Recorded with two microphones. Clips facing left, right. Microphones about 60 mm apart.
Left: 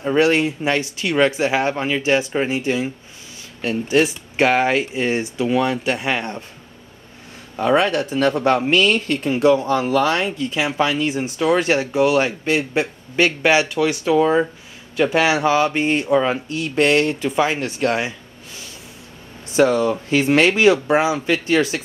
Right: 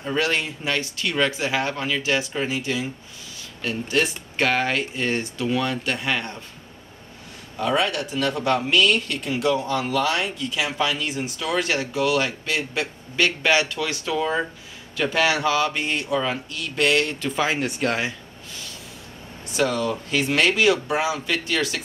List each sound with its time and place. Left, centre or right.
0.0 s speech: centre
3.6 s speech: centre
7.5 s speech: left
17.3 s speech: centre
19.5 s speech: left